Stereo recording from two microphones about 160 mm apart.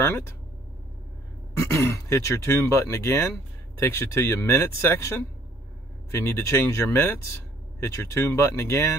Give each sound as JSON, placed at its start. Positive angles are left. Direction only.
{"t": 1.6, "sound": "speech", "side_deg": 20}